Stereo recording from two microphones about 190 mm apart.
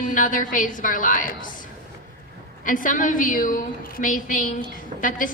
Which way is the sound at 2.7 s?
45° left (ahead or behind).